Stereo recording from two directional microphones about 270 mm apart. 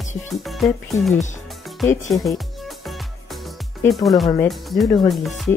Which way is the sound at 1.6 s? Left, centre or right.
Centre.